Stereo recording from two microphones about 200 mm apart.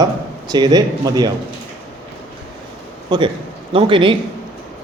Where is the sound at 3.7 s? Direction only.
25° right (ahead or behind).